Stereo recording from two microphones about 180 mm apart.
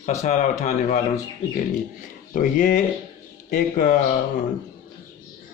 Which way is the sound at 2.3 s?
45° left (ahead or behind).